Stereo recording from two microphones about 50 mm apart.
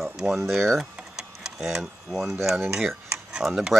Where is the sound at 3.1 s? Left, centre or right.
Centre.